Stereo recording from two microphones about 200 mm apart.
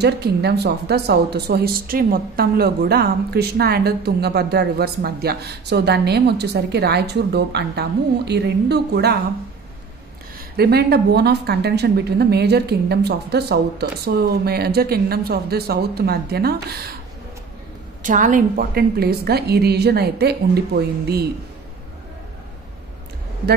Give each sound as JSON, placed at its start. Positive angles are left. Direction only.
{"t": 0.0, "sound": "speech", "side_deg": -55}
{"t": 10.5, "sound": "speech", "side_deg": -50}
{"t": 18.0, "sound": "speech", "side_deg": -40}